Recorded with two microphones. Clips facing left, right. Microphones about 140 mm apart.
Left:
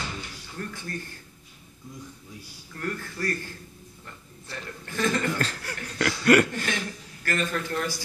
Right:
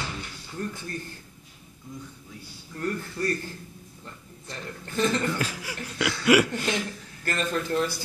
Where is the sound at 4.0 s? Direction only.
25° right (ahead or behind).